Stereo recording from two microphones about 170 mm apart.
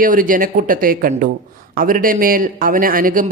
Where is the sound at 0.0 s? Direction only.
55° right (ahead or behind).